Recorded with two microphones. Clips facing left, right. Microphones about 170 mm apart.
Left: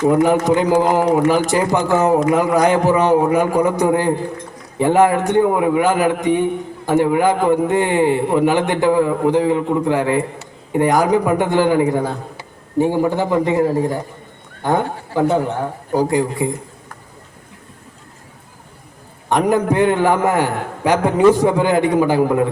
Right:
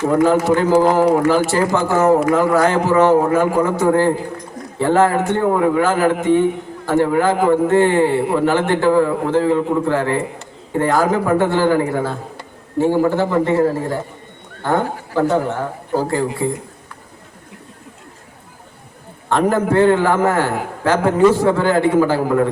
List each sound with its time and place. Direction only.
0.0 s a man's voice: 20° left (ahead or behind)
19.3 s a man's voice: 15° left (ahead or behind)